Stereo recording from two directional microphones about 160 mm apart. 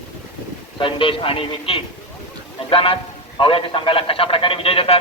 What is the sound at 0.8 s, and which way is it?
A man's voice, 35° left (ahead or behind).